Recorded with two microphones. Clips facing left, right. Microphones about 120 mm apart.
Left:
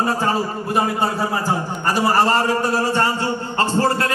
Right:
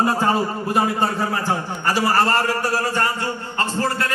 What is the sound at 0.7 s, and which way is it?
A man's voice, 10° left (ahead or behind).